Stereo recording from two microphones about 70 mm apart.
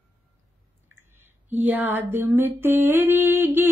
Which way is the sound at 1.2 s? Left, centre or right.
Right.